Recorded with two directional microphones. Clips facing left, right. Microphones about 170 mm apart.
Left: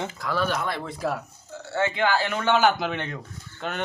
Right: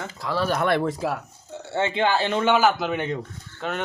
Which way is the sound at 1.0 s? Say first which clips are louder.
Right 1 dB; 15° right (ahead or behind).